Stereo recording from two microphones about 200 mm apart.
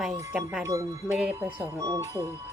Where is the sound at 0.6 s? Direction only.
15° right (ahead or behind).